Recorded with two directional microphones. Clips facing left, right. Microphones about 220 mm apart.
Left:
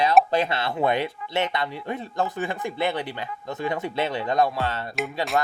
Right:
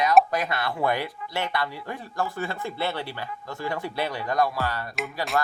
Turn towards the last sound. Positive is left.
turn(degrees=25)  # may be behind; listen again after turning